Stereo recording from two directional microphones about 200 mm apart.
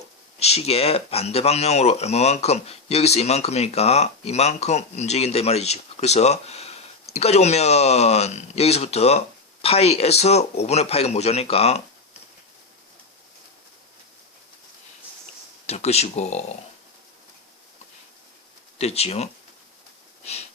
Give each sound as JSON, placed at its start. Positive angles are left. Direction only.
{"t": 0.3, "sound": "speech", "side_deg": 30}
{"t": 15.6, "sound": "speech", "side_deg": 30}
{"t": 18.8, "sound": "speech", "side_deg": 30}